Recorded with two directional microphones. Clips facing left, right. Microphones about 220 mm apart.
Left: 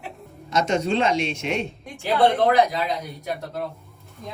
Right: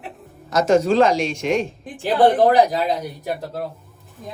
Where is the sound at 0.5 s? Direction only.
30° right (ahead or behind).